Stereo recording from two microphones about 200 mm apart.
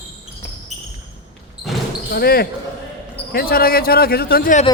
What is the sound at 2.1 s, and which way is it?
A man's voice, 50° left (ahead or behind).